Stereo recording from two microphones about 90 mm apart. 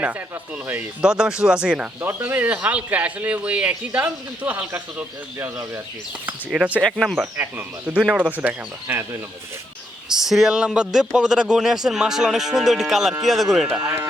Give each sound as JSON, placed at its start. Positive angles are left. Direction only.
{"t": 0.7, "sound": "speech", "side_deg": -10}
{"t": 2.0, "sound": "speech", "side_deg": -25}
{"t": 6.5, "sound": "speech", "side_deg": -15}
{"t": 6.8, "sound": "speech", "side_deg": 5}
{"t": 7.3, "sound": "speech", "side_deg": -20}
{"t": 10.1, "sound": "speech", "side_deg": -5}
{"t": 13.7, "sound": "speech", "side_deg": -25}